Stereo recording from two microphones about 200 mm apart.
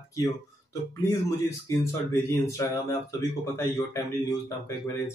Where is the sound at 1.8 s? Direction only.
15° left (ahead or behind).